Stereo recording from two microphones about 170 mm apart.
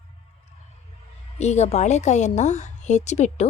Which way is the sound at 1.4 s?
40° left (ahead or behind).